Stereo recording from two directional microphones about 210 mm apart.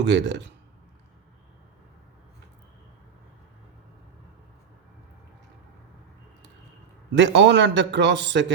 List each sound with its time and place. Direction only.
0.0 s a man's voice: 55° right (ahead or behind)
7.2 s a man's voice: 55° right (ahead or behind)